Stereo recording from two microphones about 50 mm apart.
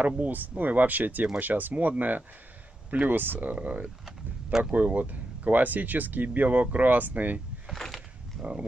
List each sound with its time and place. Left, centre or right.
0.2 s speech: right
3.5 s speech: right
4.0 s a sound: centre
4.7 s speech: right
7.7 s a sound: centre
8.4 s speech: right